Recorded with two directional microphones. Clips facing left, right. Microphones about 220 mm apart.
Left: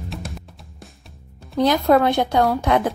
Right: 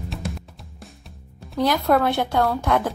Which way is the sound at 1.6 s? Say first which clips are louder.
Left 3 dB; 20° left (ahead or behind).